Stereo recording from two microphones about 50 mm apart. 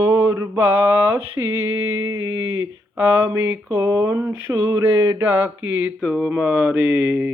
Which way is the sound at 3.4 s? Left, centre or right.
Right.